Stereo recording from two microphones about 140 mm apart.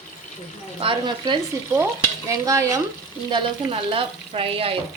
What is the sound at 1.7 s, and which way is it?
Stir, 20° right (ahead or behind).